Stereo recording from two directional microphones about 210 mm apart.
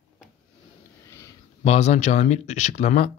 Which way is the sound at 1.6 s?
35° left (ahead or behind).